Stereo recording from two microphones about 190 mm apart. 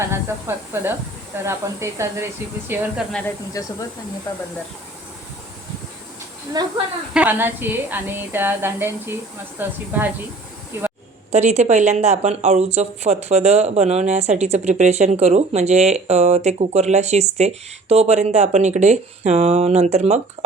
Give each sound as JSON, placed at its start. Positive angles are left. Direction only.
{"t": 0.0, "sound": "a woman's voice", "side_deg": -15}
{"t": 3.1, "sound": "speech", "side_deg": 5}
{"t": 3.6, "sound": "speech", "side_deg": 15}
{"t": 6.5, "sound": "speech", "side_deg": -20}
{"t": 7.1, "sound": "a woman's voice", "side_deg": -10}
{"t": 11.3, "sound": "speech", "side_deg": -35}